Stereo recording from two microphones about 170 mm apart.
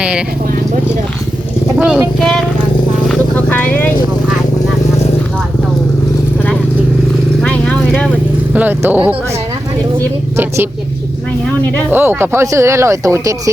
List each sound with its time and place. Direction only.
1.8 s speech: 5° right (ahead or behind)
3.1 s vehicle: 10° left (ahead or behind)
7.4 s vehicle: 10° left (ahead or behind)
8.5 s speech: 10° right (ahead or behind)
11.9 s speech: 10° right (ahead or behind)